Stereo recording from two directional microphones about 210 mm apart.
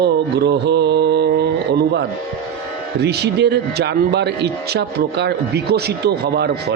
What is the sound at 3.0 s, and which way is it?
Speech, 50° right (ahead or behind).